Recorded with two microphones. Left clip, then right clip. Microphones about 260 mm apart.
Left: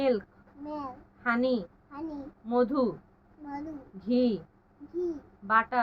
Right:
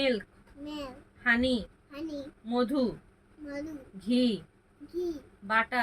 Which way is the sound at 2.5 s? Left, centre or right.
Right.